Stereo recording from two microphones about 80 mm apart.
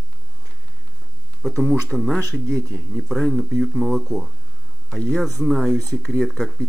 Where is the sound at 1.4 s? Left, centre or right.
Centre.